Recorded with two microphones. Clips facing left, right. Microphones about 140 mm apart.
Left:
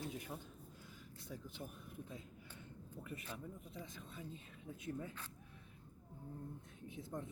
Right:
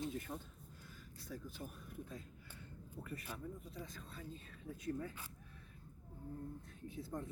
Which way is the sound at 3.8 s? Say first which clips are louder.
Even; 20° left (ahead or behind).